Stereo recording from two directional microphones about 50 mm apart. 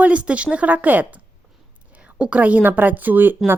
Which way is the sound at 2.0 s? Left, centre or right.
Right.